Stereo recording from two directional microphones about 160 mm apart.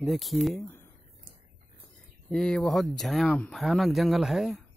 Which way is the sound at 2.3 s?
5° left (ahead or behind).